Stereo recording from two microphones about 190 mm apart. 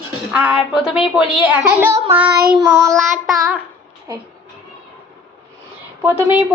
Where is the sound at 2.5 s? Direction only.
Centre (ahead or behind).